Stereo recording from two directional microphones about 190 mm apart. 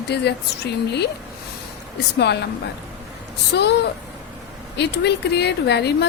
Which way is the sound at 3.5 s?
60° left (ahead or behind).